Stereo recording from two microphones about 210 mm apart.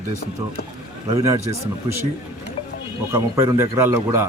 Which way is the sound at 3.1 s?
15° right (ahead or behind).